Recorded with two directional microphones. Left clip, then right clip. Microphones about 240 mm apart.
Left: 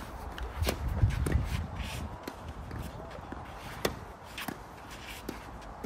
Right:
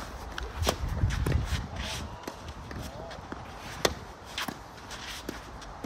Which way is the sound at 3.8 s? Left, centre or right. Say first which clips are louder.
Right 6 dB; centre.